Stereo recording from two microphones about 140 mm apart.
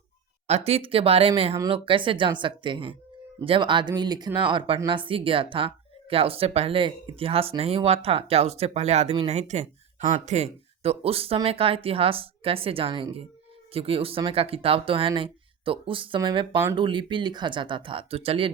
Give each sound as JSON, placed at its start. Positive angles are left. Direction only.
{"t": 0.4, "sound": "speech", "side_deg": -50}